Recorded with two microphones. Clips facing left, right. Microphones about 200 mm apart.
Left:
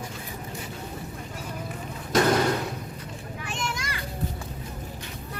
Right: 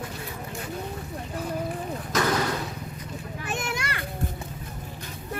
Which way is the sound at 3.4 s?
60° right (ahead or behind).